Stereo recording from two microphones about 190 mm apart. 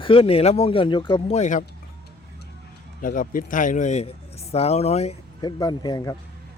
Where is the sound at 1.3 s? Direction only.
40° left (ahead or behind).